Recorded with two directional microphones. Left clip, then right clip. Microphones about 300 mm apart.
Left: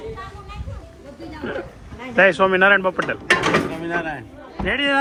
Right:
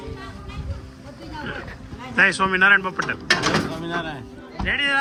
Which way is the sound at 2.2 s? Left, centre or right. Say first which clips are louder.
Left 3 dB; centre.